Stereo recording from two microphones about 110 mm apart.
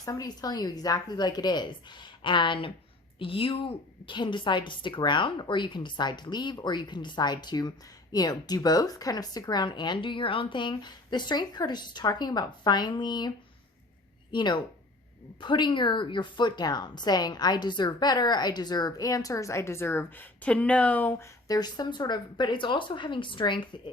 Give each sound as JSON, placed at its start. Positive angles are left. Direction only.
{"t": 0.0, "sound": "a woman's voice", "side_deg": 35}
{"t": 21.4, "sound": "a woman's voice", "side_deg": 35}